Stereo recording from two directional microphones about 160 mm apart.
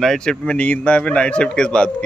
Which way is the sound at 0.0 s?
5° left (ahead or behind).